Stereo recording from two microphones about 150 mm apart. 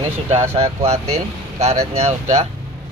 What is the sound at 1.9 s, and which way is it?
Speech, 45° right (ahead or behind).